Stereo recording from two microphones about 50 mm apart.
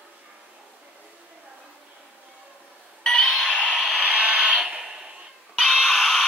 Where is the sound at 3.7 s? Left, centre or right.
Right.